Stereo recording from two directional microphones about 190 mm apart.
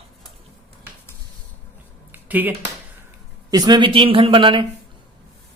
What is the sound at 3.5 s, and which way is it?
Speech, 20° right (ahead or behind).